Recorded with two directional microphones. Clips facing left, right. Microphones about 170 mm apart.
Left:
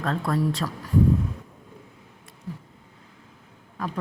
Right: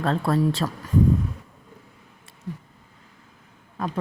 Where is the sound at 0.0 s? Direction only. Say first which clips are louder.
Right 3 dB; 30° right (ahead or behind).